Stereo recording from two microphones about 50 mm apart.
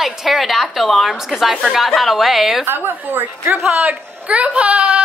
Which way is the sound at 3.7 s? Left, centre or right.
Right.